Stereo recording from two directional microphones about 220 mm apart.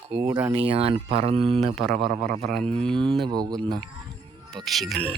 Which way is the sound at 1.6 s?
Centre (ahead or behind).